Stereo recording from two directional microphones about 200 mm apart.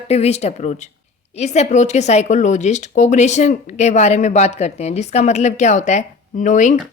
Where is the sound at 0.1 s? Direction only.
30° left (ahead or behind).